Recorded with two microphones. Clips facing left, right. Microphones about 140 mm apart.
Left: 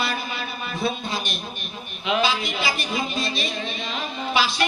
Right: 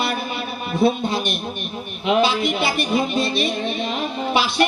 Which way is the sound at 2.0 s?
55° right (ahead or behind).